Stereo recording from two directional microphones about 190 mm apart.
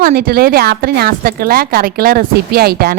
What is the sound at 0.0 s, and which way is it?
A woman's voice, 50° right (ahead or behind).